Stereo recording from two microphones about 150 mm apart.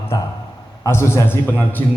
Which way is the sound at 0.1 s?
25° left (ahead or behind).